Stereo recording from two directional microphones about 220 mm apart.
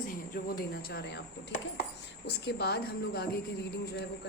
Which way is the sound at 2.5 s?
50° left (ahead or behind).